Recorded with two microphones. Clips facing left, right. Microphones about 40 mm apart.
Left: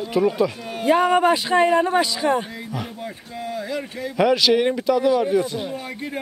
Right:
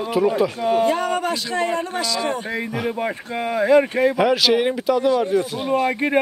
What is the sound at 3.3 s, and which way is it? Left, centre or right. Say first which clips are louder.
Speech: right 12 dB; right.